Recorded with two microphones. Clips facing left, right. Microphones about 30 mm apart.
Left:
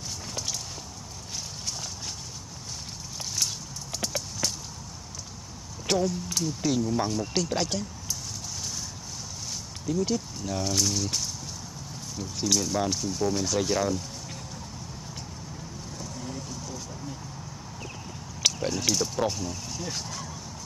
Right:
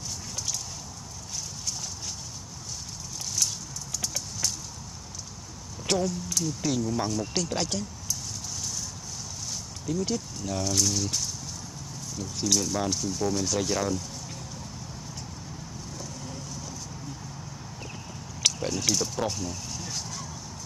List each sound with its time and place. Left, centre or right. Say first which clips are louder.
3.9 s clip-clop: left 3 dB; left
5.9 s speech: left 1 dB; centre
6.2 s speech: left 1 dB; centre
9.8 s speech: left 2 dB; centre
18.4 s a sound: left 1 dB; centre
19.9 s speech: even; centre